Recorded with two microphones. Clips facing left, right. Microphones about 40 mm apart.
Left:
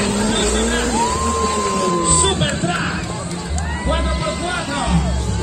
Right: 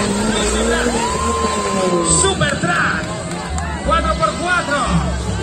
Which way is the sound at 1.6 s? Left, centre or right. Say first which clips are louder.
Right 1 dB; right.